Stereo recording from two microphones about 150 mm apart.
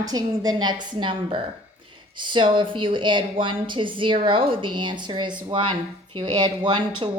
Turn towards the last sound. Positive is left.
turn(degrees=-30)  # may be behind; listen again after turning